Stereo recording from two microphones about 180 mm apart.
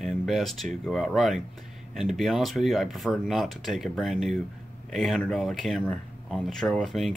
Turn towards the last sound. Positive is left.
turn(degrees=0)  # may be behind; listen again after turning